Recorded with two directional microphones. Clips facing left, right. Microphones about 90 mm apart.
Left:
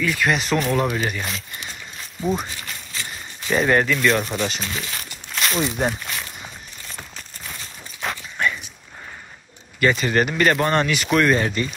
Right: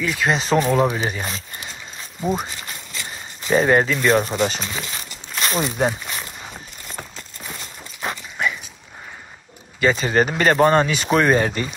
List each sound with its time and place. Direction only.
0.0 s speech: 25° right (ahead or behind)
3.4 s speech: 30° right (ahead or behind)
4.9 s a sound: centre (ahead or behind)
5.7 s speech: 5° right (ahead or behind)
8.0 s dog: 5° right (ahead or behind)
9.8 s speech: 25° right (ahead or behind)